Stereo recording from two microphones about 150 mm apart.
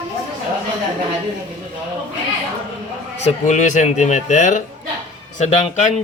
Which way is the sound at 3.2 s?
50° left (ahead or behind).